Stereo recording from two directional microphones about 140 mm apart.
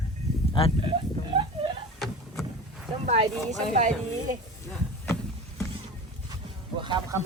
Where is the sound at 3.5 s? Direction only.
60° right (ahead or behind).